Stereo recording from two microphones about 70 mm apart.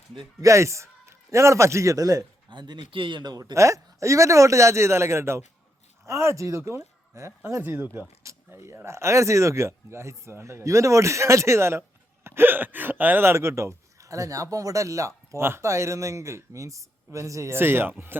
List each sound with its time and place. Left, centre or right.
0.4 s speech: right
3.5 s speech: right
7.6 s speech: right
8.2 s speech: right
17.6 s speech: right